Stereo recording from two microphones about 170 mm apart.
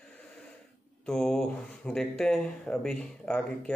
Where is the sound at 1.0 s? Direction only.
5° left (ahead or behind).